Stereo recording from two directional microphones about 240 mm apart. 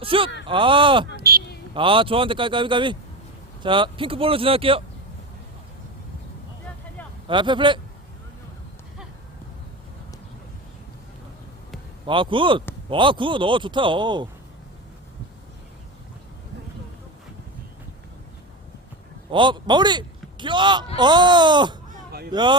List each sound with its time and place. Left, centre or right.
0.0 s a man's voice: right
1.1 s a sound: right
1.7 s a man's voice: right
7.3 s a man's voice: centre
12.0 s a man's voice: right
19.3 s a man's voice: centre